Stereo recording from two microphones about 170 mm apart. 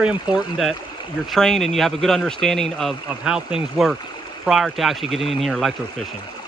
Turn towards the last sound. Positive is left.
turn(degrees=0)  # may be behind; listen again after turning